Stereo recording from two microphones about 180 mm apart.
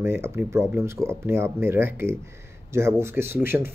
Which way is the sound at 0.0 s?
15° right (ahead or behind).